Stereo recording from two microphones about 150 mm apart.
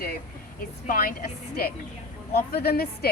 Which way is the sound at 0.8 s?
75° left (ahead or behind).